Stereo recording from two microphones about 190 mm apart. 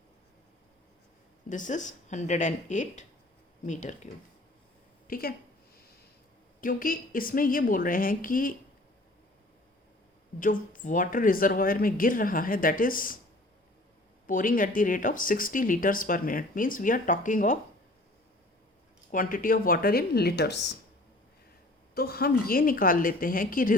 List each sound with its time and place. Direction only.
1.5 s speech: 40° left (ahead or behind)
5.0 s a woman's voice: 50° left (ahead or behind)
6.6 s speech: 50° left (ahead or behind)
10.4 s speech: 45° left (ahead or behind)
14.3 s speech: 45° left (ahead or behind)
19.1 s speech: 45° left (ahead or behind)
21.9 s speech: 55° left (ahead or behind)